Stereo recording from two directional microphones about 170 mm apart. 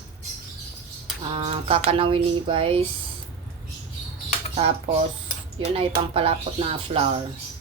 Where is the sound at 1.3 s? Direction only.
35° right (ahead or behind).